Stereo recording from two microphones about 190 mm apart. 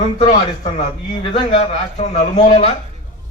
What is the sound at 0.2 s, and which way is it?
A man's voice, 35° left (ahead or behind).